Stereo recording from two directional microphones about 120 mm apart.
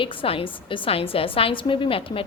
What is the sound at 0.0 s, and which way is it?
A woman's voice, 45° left (ahead or behind).